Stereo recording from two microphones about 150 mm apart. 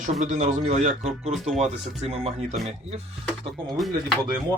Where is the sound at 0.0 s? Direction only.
55° right (ahead or behind).